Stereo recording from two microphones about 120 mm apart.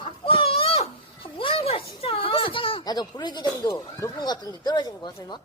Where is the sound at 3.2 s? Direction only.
40° left (ahead or behind).